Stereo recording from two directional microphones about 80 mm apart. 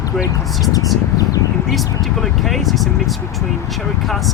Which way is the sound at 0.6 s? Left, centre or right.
Left.